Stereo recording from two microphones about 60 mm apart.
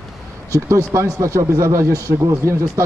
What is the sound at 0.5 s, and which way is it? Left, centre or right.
Speech, right.